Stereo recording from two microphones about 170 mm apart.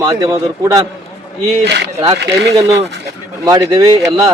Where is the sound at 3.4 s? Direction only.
20° right (ahead or behind).